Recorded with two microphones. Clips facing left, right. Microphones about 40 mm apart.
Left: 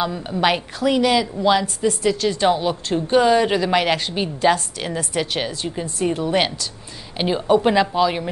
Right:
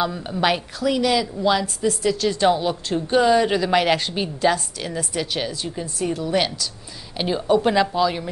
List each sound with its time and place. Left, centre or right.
0.0 s a woman's voice: centre
0.7 s a woman's voice: left